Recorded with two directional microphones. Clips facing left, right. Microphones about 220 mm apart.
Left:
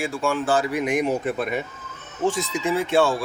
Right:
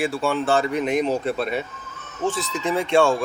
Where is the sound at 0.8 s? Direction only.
10° left (ahead or behind).